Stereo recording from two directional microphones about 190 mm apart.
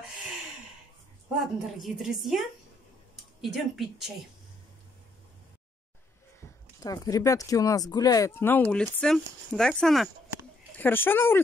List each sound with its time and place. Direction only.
1.4 s speech: centre (ahead or behind)
6.8 s speech: 20° left (ahead or behind)